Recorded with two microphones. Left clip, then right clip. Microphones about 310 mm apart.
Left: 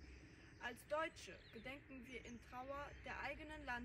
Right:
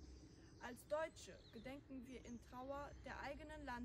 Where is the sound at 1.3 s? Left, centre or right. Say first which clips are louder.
Left 2 dB; centre.